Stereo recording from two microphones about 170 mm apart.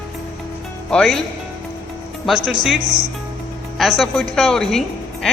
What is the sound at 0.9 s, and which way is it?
Speech, 5° left (ahead or behind).